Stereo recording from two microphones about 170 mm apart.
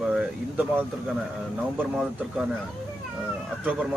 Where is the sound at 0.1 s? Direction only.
10° right (ahead or behind).